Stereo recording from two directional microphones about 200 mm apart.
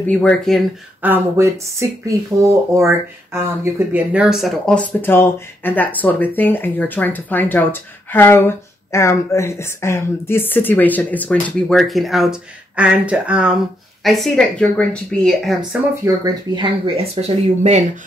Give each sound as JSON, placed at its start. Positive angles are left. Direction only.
{"t": 0.0, "sound": "speech", "side_deg": 5}
{"t": 1.0, "sound": "speech", "side_deg": -10}
{"t": 16.1, "sound": "speech", "side_deg": -25}